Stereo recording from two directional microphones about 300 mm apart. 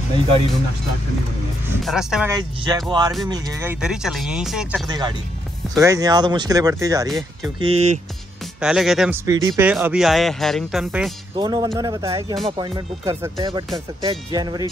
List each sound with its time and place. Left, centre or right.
1.9 s speech: centre
4.8 s speech: centre
8.5 s speech: centre
11.3 s speech: centre